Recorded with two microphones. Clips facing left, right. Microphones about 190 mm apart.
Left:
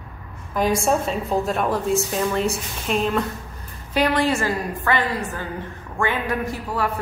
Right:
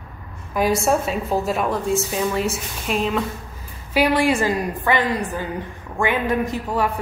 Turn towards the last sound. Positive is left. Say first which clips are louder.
# right 4 dB
turn(degrees=-20)  # may be behind; listen again after turning